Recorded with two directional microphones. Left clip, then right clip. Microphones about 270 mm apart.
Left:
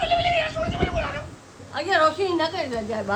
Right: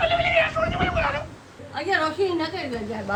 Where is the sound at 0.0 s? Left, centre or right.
Centre.